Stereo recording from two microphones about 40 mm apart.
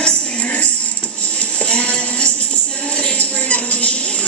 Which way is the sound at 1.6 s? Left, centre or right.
Left.